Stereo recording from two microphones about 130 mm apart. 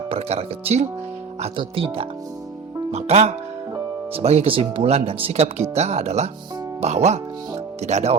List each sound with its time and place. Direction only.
0.1 s speech: 55° right (ahead or behind)
2.9 s speech: 55° right (ahead or behind)